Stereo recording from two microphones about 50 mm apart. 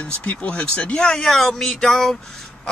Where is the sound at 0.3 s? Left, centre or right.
Left; by 2.1 s centre.